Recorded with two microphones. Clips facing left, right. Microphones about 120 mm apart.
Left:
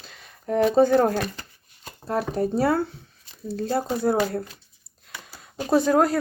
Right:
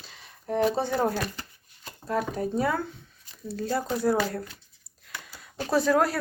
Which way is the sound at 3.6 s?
30° left (ahead or behind).